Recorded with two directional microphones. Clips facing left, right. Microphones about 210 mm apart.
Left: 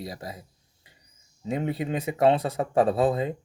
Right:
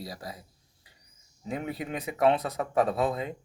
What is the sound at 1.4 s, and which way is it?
Speech, 25° left (ahead or behind).